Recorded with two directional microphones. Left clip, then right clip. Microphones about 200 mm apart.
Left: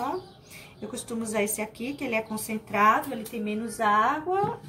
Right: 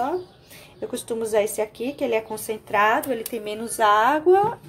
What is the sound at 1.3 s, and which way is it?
A woman's voice, 30° right (ahead or behind).